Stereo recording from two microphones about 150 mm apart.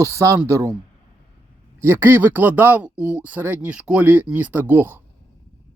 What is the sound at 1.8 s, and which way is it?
Speech, 15° right (ahead or behind).